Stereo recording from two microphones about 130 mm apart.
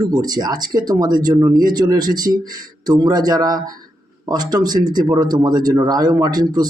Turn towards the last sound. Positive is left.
turn(degrees=-30)  # may be behind; listen again after turning